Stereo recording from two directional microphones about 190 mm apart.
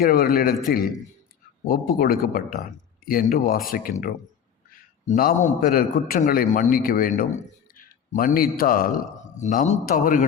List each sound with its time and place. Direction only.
0.0 s a man's voice: 50° left (ahead or behind)
5.0 s a man's voice: 45° left (ahead or behind)